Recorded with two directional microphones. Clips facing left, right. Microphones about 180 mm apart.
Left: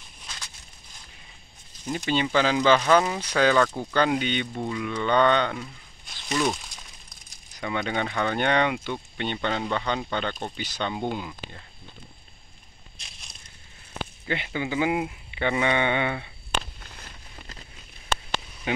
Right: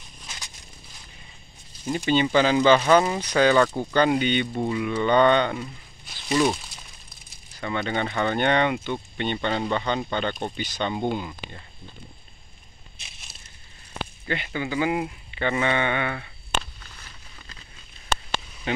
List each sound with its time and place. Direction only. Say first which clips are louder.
1.9 s speech: right 4 dB; centre (ahead or behind)
7.5 s speech: right 1 dB; 10° left (ahead or behind)
12.9 s crushing: even; 5° right (ahead or behind)
14.2 s speech: even; 15° left (ahead or behind)
16.8 s a sound: left 2 dB; 25° left (ahead or behind)